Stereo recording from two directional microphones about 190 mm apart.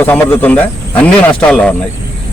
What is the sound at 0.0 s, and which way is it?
Speech, 10° left (ahead or behind).